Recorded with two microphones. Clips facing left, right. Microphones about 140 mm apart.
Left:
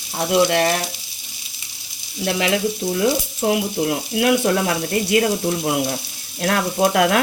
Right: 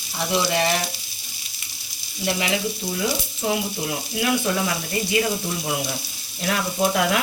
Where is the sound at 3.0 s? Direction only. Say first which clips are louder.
Left 6 dB; 55° left (ahead or behind).